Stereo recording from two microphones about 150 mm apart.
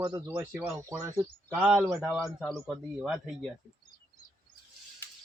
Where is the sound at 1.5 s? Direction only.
5° right (ahead or behind).